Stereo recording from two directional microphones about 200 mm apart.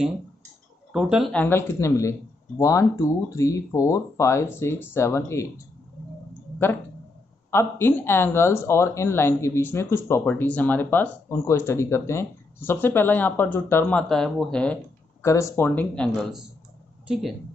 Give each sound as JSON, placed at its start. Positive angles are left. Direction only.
{"t": 0.9, "sound": "speech", "side_deg": -5}
{"t": 7.5, "sound": "speech", "side_deg": 10}